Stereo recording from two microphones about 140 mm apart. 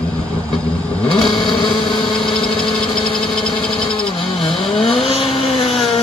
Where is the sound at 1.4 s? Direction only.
35° left (ahead or behind).